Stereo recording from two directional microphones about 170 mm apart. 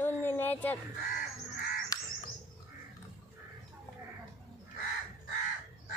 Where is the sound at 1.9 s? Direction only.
20° left (ahead or behind).